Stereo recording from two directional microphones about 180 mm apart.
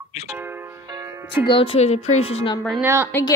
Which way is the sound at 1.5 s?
30° left (ahead or behind).